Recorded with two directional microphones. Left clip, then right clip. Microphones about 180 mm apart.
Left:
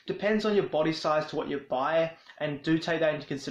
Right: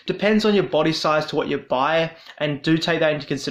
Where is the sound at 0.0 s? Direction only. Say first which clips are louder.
Right 8 dB; 35° right (ahead or behind).